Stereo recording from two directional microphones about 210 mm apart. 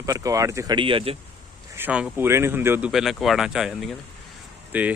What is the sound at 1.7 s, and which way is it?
Speech, 5° right (ahead or behind).